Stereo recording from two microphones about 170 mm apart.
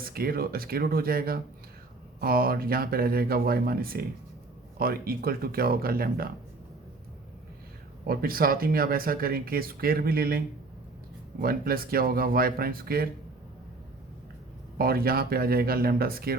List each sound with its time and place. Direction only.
0.0 s speech: 60° right (ahead or behind)
8.0 s speech: 60° right (ahead or behind)
14.8 s speech: 60° right (ahead or behind)